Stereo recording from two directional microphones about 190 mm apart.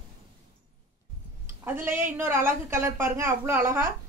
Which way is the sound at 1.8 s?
10° right (ahead or behind).